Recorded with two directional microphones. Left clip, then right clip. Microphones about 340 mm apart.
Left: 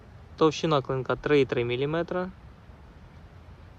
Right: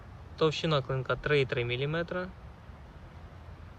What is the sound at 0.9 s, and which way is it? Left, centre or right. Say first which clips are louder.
Speech: left 5 dB; left.